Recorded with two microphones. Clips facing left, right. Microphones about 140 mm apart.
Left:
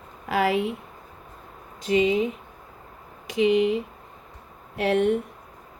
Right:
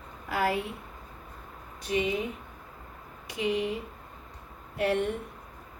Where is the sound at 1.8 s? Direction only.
90° left.